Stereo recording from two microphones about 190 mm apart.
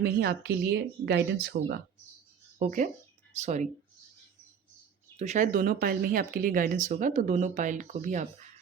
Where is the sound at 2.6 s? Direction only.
40° right (ahead or behind).